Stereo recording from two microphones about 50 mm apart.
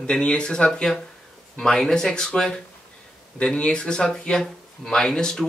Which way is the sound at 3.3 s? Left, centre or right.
Left.